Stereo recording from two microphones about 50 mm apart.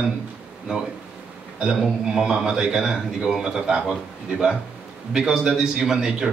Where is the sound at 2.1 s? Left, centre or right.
Centre.